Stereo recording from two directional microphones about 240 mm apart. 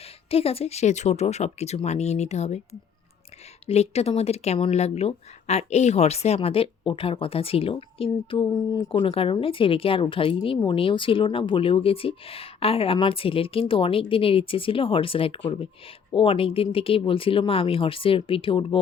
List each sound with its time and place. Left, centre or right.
0.3 s speech: left
3.7 s speech: left